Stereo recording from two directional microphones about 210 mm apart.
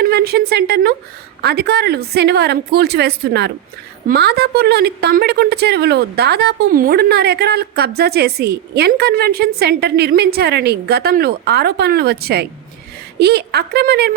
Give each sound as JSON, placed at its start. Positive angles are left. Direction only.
{"t": 0.0, "sound": "a woman's voice", "side_deg": -50}